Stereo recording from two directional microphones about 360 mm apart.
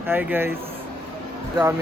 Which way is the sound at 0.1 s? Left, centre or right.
Centre.